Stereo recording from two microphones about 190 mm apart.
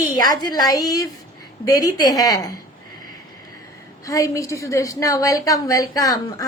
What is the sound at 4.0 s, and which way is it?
A woman's voice, 15° left (ahead or behind).